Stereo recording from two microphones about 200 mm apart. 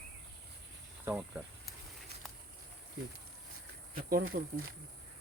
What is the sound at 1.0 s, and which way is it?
Speech, 10° right (ahead or behind).